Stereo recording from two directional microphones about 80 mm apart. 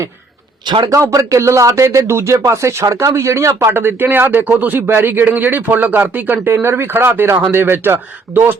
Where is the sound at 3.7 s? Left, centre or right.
Right.